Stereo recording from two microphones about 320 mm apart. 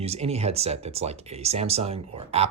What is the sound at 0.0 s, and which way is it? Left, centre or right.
Speech, centre.